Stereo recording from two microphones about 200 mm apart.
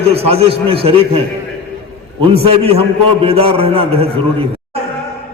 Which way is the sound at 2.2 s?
30° right (ahead or behind).